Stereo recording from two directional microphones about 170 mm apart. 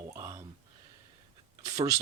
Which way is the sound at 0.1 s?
15° right (ahead or behind).